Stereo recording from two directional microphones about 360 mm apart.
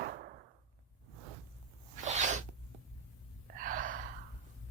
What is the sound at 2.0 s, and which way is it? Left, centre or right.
Sneeze, centre.